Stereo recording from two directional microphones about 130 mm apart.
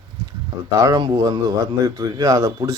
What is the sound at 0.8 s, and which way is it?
A man's voice, 30° right (ahead or behind).